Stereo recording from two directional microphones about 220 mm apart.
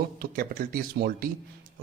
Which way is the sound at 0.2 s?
40° right (ahead or behind).